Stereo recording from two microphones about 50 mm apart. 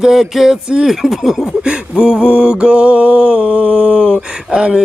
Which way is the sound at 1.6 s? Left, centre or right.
Centre.